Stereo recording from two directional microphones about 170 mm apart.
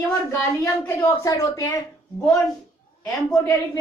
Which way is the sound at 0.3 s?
15° left (ahead or behind).